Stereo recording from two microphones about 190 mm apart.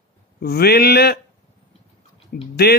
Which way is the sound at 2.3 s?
55° left (ahead or behind).